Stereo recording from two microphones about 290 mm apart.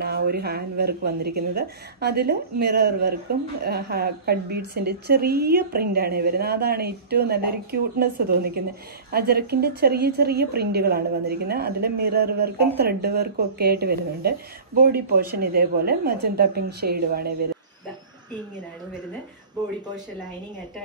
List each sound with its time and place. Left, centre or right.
0.0 s a woman's voice: right